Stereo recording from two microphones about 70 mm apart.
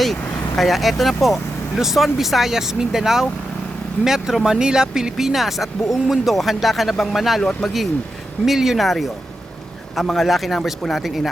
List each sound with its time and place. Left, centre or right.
0.0 s speech: centre